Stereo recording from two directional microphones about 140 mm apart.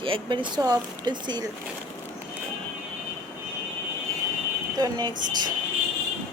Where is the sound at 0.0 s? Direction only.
35° right (ahead or behind).